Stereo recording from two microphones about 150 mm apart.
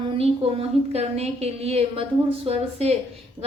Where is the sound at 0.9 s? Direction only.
45° right (ahead or behind).